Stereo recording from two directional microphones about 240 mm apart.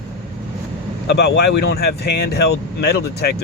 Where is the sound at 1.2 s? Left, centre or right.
Left.